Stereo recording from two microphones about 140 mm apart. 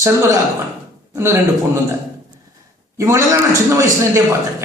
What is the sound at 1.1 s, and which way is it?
Speech, 15° right (ahead or behind).